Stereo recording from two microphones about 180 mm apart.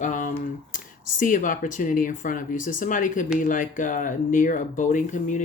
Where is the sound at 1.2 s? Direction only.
45° left (ahead or behind).